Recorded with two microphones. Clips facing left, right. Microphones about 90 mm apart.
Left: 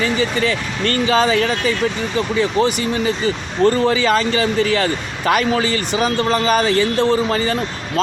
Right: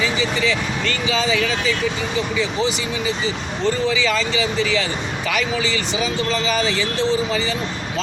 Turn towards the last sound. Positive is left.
turn(degrees=50)  # may be behind; listen again after turning